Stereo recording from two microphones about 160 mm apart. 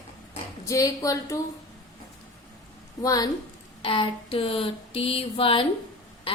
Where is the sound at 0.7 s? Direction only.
20° left (ahead or behind).